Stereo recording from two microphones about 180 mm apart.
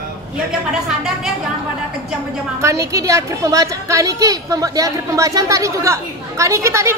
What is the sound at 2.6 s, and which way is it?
A woman's voice, 15° right (ahead or behind).